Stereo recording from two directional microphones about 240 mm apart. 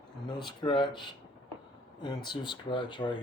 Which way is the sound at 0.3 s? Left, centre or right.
Centre.